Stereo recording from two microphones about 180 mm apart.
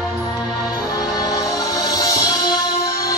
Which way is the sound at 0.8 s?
20° left (ahead or behind).